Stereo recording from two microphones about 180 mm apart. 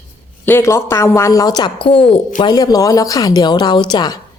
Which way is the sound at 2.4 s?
20° left (ahead or behind).